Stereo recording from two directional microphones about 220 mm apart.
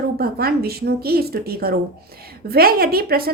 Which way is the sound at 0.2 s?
45° right (ahead or behind).